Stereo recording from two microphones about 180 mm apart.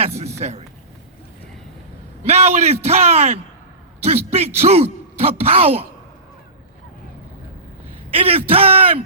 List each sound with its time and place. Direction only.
0.2 s a sound: 35° right (ahead or behind)
2.2 s a man's voice: 40° right (ahead or behind)
8.1 s a man's voice: 30° right (ahead or behind)